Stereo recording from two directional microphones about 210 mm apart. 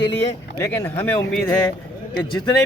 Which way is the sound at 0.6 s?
10° left (ahead or behind).